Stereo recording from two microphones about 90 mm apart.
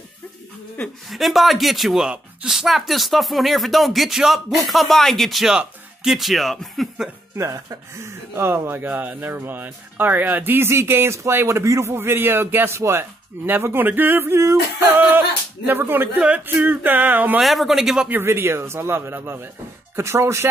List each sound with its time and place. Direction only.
1.1 s speech: centre (ahead or behind)
7.3 s speech: 35° right (ahead or behind); by 17.4 s 20° right (ahead or behind)
17.4 s speech: centre (ahead or behind)
18.0 s speech: 25° right (ahead or behind)